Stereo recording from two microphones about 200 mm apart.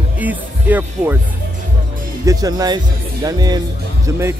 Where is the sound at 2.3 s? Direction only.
20° right (ahead or behind).